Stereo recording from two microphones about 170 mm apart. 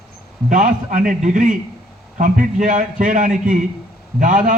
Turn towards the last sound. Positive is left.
turn(degrees=-50)  # may be behind; listen again after turning